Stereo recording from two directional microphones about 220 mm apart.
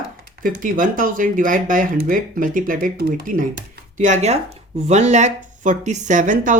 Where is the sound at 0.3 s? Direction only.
40° right (ahead or behind).